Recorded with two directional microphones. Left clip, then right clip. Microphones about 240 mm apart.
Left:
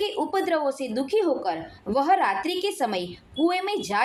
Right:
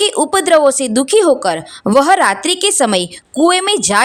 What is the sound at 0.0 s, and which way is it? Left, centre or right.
Speech, right.